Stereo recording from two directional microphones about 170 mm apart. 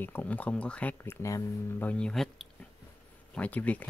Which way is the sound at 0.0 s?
10° left (ahead or behind).